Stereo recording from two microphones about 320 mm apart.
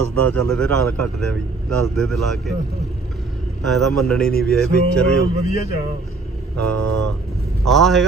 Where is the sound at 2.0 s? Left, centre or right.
Centre.